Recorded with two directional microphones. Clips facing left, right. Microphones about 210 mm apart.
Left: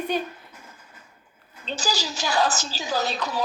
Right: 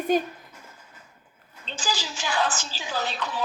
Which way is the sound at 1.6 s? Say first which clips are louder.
Left 3 dB; 40° left (ahead or behind).